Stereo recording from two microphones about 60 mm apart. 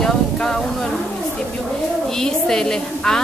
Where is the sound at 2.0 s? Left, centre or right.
Centre.